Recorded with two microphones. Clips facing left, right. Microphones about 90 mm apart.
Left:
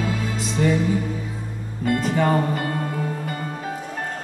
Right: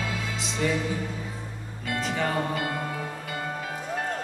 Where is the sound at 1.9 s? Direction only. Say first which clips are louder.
Left 8 dB; 40° left (ahead or behind).